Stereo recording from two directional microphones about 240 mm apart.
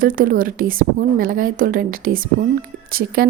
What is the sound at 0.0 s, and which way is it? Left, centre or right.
A woman's voice, right.